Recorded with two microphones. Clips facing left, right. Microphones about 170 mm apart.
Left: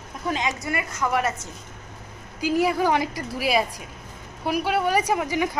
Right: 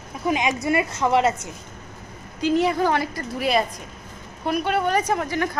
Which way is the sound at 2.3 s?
5° left (ahead or behind).